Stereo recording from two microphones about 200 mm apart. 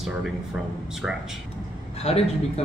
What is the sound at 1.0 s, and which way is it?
Speech, 5° right (ahead or behind).